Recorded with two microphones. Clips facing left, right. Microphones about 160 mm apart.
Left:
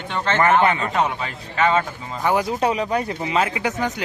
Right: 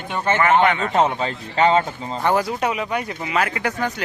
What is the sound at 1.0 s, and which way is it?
Speech, 30° right (ahead or behind).